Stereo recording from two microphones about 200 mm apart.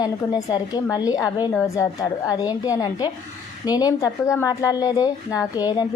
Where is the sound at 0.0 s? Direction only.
20° left (ahead or behind).